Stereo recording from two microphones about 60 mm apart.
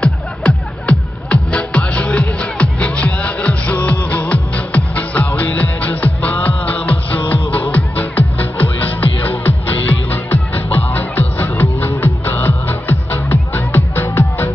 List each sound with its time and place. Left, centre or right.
0.0 s music: left